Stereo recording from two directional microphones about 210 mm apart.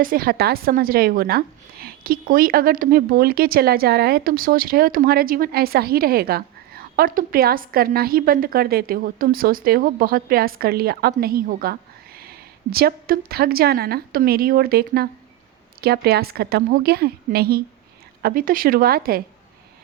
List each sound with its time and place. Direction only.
0.0 s a woman's voice: 45° right (ahead or behind)